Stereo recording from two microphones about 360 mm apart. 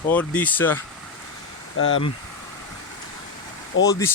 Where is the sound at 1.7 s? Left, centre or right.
Left.